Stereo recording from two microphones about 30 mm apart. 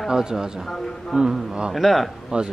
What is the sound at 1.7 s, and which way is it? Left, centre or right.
Speech, centre.